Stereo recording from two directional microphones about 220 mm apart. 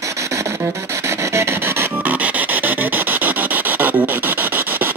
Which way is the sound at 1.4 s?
10° right (ahead or behind).